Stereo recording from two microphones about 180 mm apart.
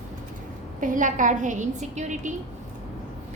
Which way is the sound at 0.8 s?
45° right (ahead or behind).